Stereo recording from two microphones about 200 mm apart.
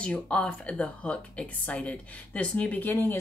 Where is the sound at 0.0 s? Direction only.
5° left (ahead or behind).